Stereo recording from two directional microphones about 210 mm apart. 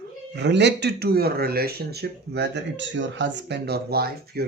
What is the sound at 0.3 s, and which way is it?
Speech, 55° right (ahead or behind).